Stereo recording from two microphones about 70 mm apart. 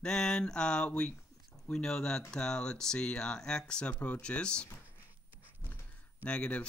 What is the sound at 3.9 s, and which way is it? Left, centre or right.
Speech, left.